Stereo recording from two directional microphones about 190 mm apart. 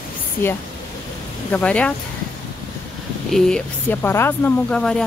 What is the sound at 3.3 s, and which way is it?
Speech, 5° left (ahead or behind).